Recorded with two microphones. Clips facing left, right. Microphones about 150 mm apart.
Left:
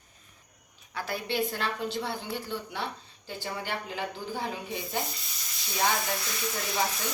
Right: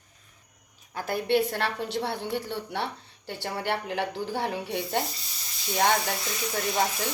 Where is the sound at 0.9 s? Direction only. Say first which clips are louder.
Right 6 dB; 50° right (ahead or behind); by 5.0 s 65° right (ahead or behind).